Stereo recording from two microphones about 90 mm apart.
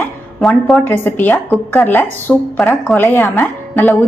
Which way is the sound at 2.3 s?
10° left (ahead or behind).